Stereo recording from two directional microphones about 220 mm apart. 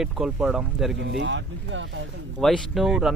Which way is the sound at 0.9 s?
55° right (ahead or behind).